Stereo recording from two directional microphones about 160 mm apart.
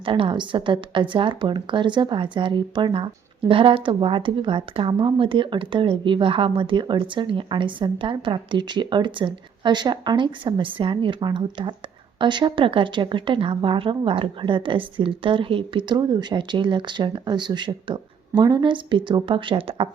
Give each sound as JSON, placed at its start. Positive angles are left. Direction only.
{"t": 0.0, "sound": "a woman's voice", "side_deg": -35}